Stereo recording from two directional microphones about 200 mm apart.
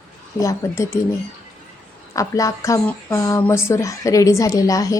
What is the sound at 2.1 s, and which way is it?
Speech, 15° left (ahead or behind).